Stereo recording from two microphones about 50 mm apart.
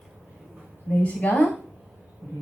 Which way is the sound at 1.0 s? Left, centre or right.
Left.